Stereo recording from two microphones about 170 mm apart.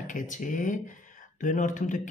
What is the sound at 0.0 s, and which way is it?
Speech, 50° left (ahead or behind).